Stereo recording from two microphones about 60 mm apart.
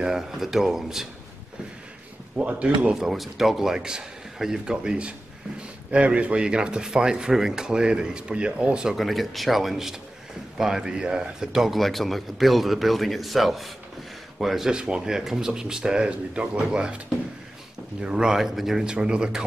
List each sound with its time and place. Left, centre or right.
0.0 s speech: centre
2.3 s speech: right
2.9 s speech: centre
8.8 s a man's voice: centre
14.7 s speech: centre
18.0 s speech: centre